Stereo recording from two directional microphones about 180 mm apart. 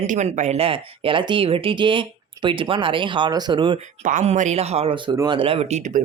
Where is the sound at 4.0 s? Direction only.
45° right (ahead or behind); by 5.4 s 20° right (ahead or behind).